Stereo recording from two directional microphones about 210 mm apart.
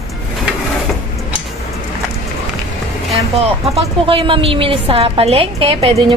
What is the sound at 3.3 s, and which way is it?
A woman's voice, 25° right (ahead or behind).